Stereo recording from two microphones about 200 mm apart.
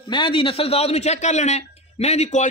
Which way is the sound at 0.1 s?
25° left (ahead or behind).